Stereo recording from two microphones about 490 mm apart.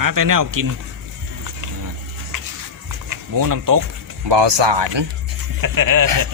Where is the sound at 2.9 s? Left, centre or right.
Right.